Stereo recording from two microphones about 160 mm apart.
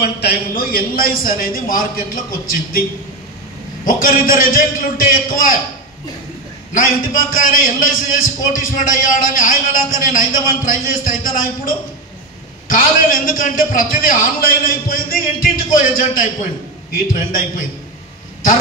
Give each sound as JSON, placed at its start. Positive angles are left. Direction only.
{"t": 0.0, "sound": "a man's voice", "side_deg": 90}
{"t": 3.8, "sound": "a man's voice", "side_deg": 60}
{"t": 6.7, "sound": "a man's voice", "side_deg": 60}